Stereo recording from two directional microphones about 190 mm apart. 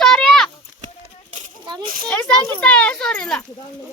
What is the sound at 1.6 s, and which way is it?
Speech, 25° right (ahead or behind).